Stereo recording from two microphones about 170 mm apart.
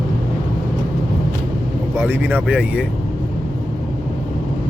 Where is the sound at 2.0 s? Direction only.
10° right (ahead or behind).